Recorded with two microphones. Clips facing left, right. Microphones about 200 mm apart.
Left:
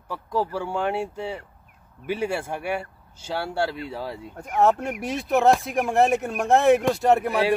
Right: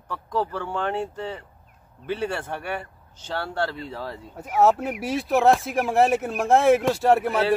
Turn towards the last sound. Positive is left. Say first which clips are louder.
# even
turn(degrees=0)  # may be behind; listen again after turning